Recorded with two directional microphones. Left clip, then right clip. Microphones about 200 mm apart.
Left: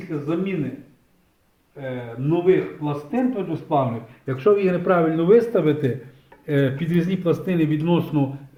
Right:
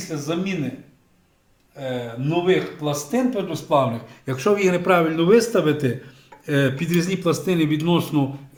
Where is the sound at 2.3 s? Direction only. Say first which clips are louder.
Left 1 dB; 30° right (ahead or behind).